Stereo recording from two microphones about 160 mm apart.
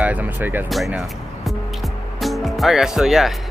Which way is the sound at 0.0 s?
10° right (ahead or behind).